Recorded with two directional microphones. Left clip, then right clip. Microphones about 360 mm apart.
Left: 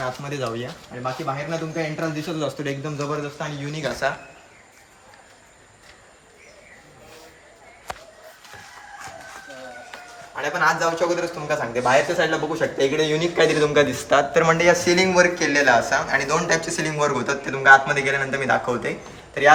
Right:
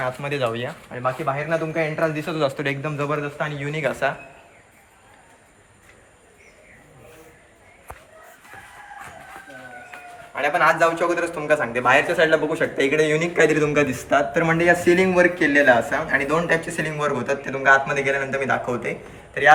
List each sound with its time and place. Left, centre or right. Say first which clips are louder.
0.0 s speech: right 3 dB; centre
10.3 s speech: right 3 dB; centre
13.7 s a man's voice: left 2 dB; left
14.3 s a man's voice: left 2 dB; centre